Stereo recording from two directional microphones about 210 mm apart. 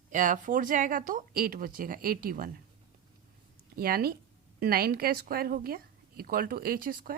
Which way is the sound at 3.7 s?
45° right (ahead or behind).